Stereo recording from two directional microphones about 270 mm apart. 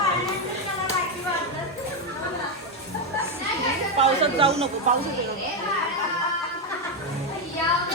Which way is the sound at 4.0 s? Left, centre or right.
Right.